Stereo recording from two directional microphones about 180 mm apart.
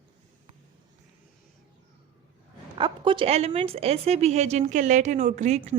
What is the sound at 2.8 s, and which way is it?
A woman's voice, 25° right (ahead or behind).